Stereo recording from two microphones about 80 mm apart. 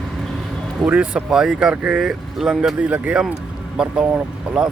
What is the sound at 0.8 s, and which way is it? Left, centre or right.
Speech, centre.